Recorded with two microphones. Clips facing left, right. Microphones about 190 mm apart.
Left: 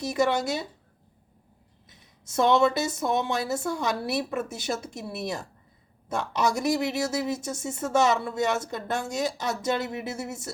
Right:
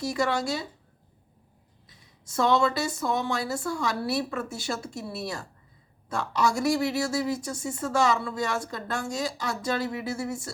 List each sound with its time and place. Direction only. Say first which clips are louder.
0.0 s speech: left 2 dB; 20° left (ahead or behind)
2.2 s speech: left 2 dB; 20° left (ahead or behind)